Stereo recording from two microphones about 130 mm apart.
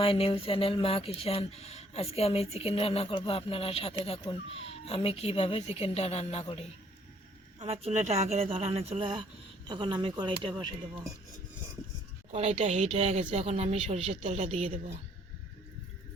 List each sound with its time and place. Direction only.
0.0 s speech: 45° left (ahead or behind)
7.6 s speech: 55° right (ahead or behind)
12.3 s speech: 55° right (ahead or behind)